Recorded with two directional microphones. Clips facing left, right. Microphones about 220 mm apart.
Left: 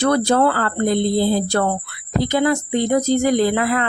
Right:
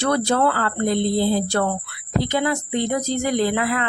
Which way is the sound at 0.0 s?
40° left (ahead or behind).